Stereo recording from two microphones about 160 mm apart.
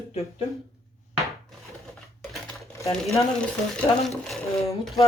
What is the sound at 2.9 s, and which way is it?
Speech, centre (ahead or behind).